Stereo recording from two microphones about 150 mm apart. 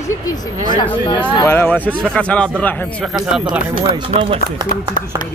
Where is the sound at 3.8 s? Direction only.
35° right (ahead or behind).